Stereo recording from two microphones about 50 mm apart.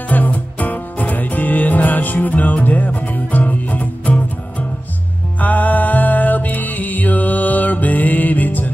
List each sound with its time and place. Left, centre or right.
0.1 s music: left